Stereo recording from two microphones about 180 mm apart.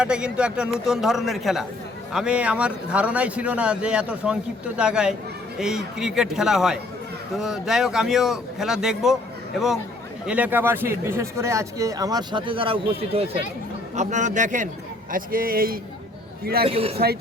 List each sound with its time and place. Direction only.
0.0 s a man's voice: 5° right (ahead or behind)
10.2 s a man's voice: 10° right (ahead or behind); by 15.8 s 55° right (ahead or behind)
16.6 s a man's voice: 35° right (ahead or behind)